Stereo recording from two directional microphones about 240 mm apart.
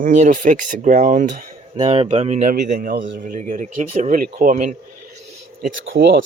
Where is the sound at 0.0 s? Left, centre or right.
Right.